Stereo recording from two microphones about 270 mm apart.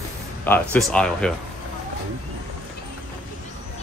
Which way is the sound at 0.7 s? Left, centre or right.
Centre.